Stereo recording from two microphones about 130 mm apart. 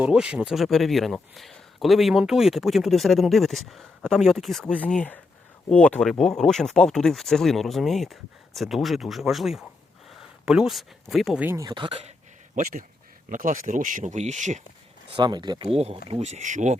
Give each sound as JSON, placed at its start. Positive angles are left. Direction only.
{"t": 0.0, "sound": "speech", "side_deg": -10}
{"t": 11.6, "sound": "speech", "side_deg": -35}
{"t": 13.3, "sound": "speech", "side_deg": -90}
{"t": 15.1, "sound": "speech", "side_deg": -35}
{"t": 15.7, "sound": "speech", "side_deg": -50}